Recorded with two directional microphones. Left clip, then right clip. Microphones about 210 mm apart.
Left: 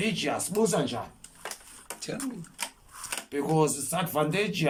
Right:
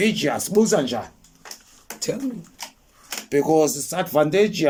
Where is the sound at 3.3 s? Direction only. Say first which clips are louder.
Right 9 dB; 40° right (ahead or behind).